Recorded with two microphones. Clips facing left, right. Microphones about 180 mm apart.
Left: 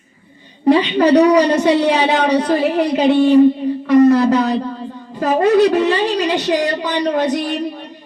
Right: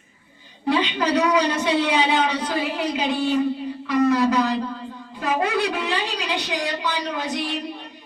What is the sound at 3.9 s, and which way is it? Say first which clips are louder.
Speech: left 8 dB; 40° left (ahead or behind).